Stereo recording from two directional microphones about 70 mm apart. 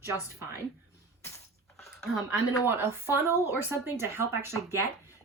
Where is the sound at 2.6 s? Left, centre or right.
Right.